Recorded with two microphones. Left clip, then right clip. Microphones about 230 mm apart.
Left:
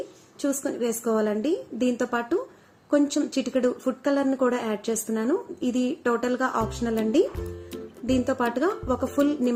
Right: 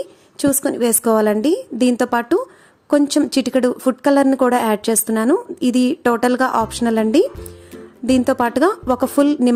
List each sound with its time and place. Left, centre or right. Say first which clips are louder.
0.3 s speech: right 9 dB; right